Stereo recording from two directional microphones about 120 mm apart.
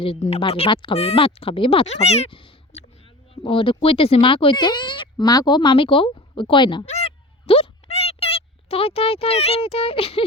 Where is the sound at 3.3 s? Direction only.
50° left (ahead or behind).